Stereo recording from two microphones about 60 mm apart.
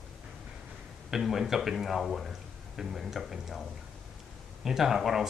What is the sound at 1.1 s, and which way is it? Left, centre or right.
Speech, centre.